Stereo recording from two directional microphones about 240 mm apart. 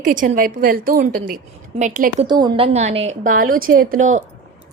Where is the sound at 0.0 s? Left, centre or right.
Right.